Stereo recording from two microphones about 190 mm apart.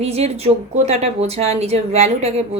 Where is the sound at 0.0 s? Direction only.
35° right (ahead or behind).